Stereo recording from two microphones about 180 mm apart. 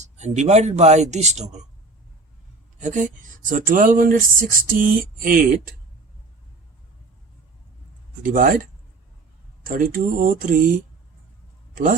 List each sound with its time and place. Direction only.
0.0 s speech: 40° right (ahead or behind)
2.8 s speech: 45° right (ahead or behind)
8.2 s speech: 50° right (ahead or behind)
9.6 s speech: 50° right (ahead or behind)